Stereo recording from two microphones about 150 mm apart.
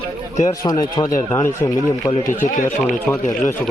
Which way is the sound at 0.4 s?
25° left (ahead or behind).